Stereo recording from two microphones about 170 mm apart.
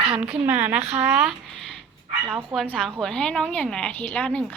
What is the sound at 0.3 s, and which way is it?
Speech, 10° right (ahead or behind).